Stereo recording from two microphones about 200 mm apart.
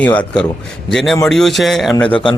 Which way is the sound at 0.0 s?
5° left (ahead or behind).